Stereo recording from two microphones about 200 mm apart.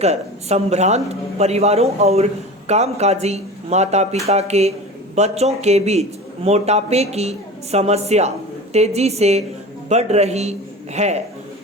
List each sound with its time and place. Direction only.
0.0 s a man's voice: 35° right (ahead or behind)